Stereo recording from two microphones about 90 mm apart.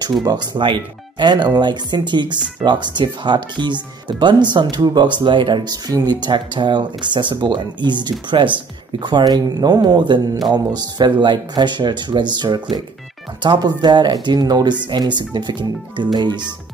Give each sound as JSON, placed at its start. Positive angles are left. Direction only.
{"t": 0.6, "sound": "speech", "side_deg": -60}